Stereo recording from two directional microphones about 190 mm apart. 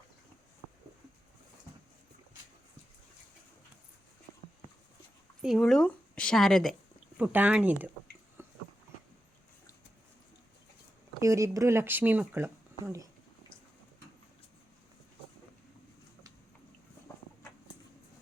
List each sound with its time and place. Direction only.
5.4 s a woman's voice: centre (ahead or behind)
8.4 s a sound: 10° right (ahead or behind)
11.2 s speech: 15° right (ahead or behind)